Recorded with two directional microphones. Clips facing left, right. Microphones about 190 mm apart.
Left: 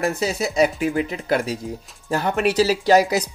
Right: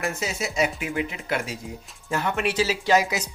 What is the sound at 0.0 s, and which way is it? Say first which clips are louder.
Speech: left 6 dB; 35° left (ahead or behind).